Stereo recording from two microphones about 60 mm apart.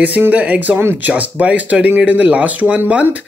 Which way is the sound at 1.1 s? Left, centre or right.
Right.